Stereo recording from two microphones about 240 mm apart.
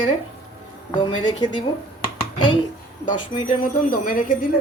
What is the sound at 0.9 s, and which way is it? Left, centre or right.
Speech, centre.